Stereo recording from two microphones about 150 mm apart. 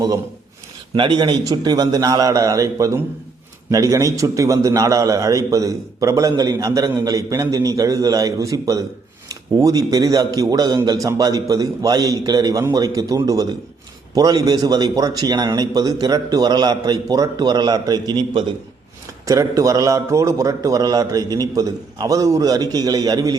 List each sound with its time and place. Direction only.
0.9 s a man's voice: 30° right (ahead or behind)